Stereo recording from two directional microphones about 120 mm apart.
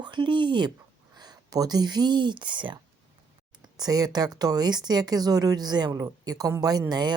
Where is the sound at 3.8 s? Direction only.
35° right (ahead or behind).